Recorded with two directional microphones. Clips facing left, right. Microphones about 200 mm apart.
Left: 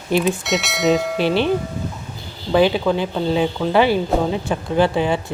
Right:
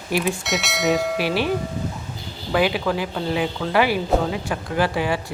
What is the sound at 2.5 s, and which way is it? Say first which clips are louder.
Speech: left 5 dB; 25° left (ahead or behind).